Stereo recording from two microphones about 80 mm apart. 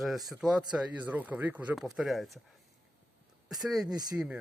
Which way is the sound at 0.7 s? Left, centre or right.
Right.